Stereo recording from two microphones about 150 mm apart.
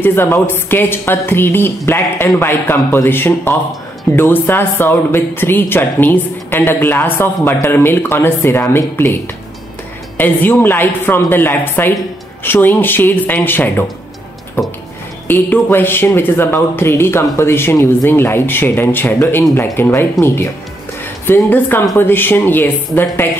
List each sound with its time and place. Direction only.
0.0 s speech: 15° left (ahead or behind)
10.1 s speech: 10° left (ahead or behind)
15.2 s speech: 15° left (ahead or behind)